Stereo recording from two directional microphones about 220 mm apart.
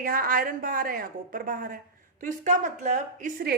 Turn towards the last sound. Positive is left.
turn(degrees=-40)  # may be behind; listen again after turning